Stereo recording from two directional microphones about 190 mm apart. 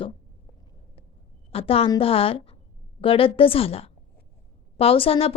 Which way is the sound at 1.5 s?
30° left (ahead or behind).